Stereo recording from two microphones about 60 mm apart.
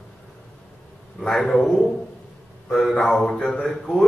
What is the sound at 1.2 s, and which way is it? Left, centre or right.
A man's voice, centre.